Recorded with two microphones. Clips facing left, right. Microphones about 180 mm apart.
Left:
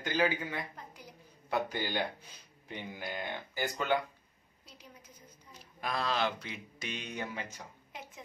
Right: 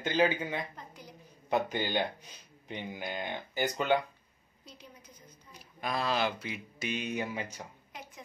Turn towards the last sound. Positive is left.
turn(degrees=-10)  # may be behind; listen again after turning